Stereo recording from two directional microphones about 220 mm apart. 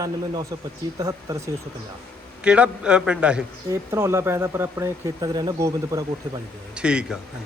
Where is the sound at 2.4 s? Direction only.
5° right (ahead or behind).